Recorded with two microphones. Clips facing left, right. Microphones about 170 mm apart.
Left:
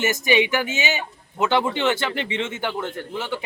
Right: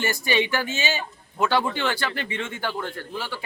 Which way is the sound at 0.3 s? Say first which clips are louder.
Left 4 dB; 15° left (ahead or behind).